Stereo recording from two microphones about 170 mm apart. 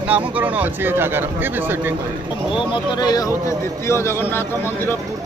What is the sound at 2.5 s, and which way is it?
A man's voice, 30° left (ahead or behind).